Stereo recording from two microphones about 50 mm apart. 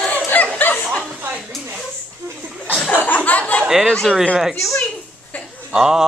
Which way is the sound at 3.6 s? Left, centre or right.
Centre.